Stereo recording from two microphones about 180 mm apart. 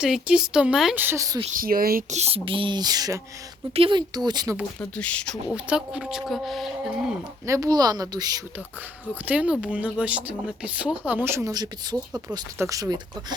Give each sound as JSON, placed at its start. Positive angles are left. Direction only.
{"t": 0.0, "sound": "speech", "side_deg": -5}
{"t": 1.5, "sound": "speech", "side_deg": -55}
{"t": 4.8, "sound": "speech", "side_deg": 5}
{"t": 5.5, "sound": "speech", "side_deg": -5}
{"t": 7.4, "sound": "speech", "side_deg": -15}
{"t": 9.2, "sound": "speech", "side_deg": -10}